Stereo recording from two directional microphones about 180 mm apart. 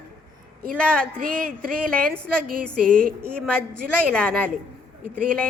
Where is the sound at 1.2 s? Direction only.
55° right (ahead or behind).